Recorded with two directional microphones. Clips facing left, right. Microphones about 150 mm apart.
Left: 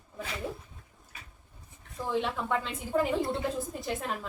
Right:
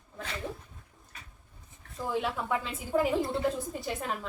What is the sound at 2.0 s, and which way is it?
A woman's voice, 5° right (ahead or behind).